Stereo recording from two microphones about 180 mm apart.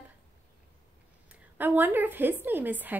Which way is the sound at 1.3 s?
10° right (ahead or behind).